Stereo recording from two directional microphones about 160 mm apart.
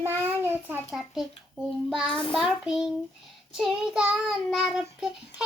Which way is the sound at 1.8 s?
5° left (ahead or behind).